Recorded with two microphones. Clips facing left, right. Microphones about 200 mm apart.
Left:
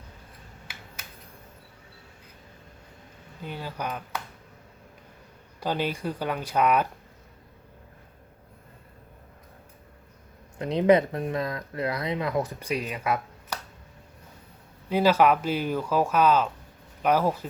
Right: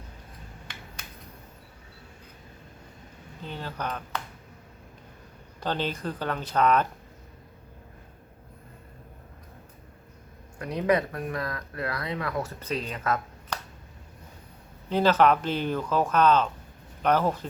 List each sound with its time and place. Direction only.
0.7 s a sound: 5° left (ahead or behind)
3.4 s speech: 10° left (ahead or behind)
5.5 s speech: 10° left (ahead or behind)
10.6 s speech: 25° left (ahead or behind)
14.8 s speech: 10° left (ahead or behind)